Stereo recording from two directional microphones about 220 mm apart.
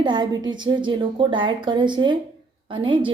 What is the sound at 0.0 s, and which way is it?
A woman's voice, 20° right (ahead or behind).